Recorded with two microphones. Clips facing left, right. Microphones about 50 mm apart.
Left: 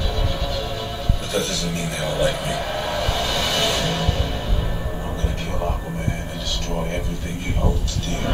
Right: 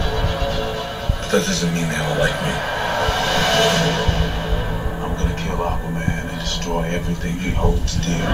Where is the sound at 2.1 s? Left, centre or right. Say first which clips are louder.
Right 1 dB; right.